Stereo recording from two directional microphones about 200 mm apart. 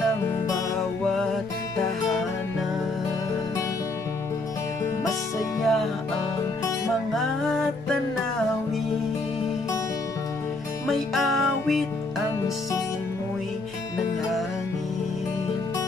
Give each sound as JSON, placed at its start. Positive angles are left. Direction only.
{"t": 5.6, "sound": "music", "side_deg": 0}
{"t": 7.2, "sound": "music", "side_deg": 0}
{"t": 10.9, "sound": "music", "side_deg": 0}